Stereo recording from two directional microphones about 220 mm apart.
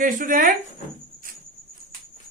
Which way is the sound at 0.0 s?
40° right (ahead or behind).